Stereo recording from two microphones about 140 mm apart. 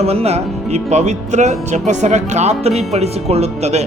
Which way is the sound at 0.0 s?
45° right (ahead or behind).